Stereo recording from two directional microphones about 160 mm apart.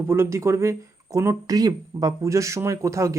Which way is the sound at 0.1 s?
15° right (ahead or behind).